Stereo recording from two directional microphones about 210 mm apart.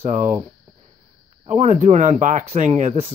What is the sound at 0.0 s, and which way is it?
Speech, 35° right (ahead or behind).